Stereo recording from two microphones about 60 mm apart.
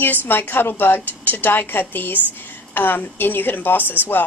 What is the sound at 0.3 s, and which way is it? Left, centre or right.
A woman's voice, left.